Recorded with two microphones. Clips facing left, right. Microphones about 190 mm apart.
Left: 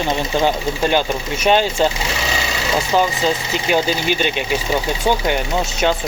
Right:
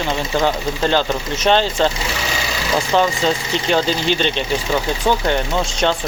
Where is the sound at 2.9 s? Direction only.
5° left (ahead or behind).